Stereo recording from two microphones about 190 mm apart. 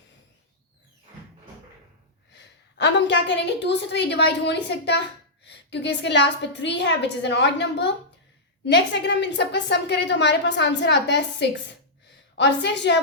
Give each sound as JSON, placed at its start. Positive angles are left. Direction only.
{"t": 2.3, "sound": "a woman's voice", "side_deg": 65}